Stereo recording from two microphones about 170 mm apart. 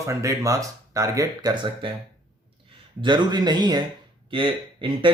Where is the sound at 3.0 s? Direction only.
25° right (ahead or behind).